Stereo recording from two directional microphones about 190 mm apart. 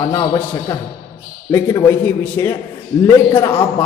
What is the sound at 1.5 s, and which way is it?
A man's voice, 15° left (ahead or behind).